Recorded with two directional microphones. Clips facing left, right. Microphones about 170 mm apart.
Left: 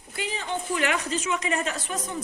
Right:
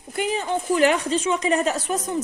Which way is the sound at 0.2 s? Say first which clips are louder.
Right 7 dB; 45° right (ahead or behind).